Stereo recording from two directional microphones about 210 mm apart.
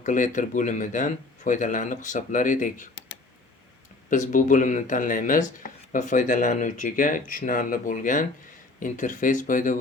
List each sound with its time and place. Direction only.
0.0 s speech: 40° left (ahead or behind)
4.1 s speech: 35° left (ahead or behind)